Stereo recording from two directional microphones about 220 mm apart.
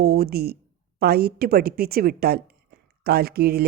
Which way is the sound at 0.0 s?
45° right (ahead or behind).